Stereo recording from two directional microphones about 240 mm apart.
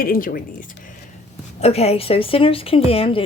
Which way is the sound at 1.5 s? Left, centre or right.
Left.